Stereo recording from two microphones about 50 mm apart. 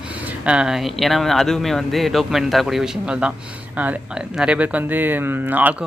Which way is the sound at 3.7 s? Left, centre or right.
Right.